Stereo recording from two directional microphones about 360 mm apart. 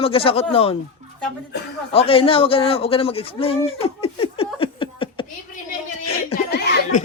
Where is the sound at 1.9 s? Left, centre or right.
Centre.